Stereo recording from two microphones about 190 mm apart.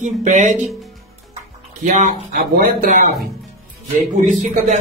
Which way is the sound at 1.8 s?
40° right (ahead or behind).